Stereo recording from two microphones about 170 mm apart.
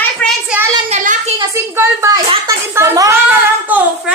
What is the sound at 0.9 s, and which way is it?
Speech, 45° right (ahead or behind).